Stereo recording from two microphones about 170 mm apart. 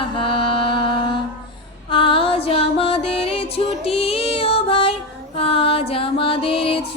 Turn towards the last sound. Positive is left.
turn(degrees=35)  # may be behind; listen again after turning